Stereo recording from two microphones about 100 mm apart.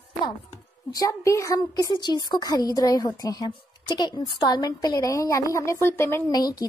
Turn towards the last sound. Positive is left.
turn(degrees=40)  # may be behind; listen again after turning